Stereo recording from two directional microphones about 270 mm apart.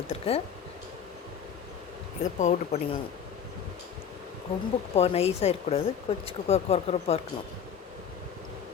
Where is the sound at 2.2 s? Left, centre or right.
Left.